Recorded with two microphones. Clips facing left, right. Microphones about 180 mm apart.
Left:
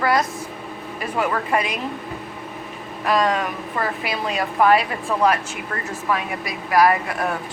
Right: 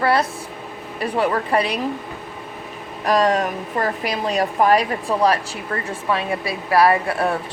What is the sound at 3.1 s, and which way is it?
A woman's voice, 40° right (ahead or behind).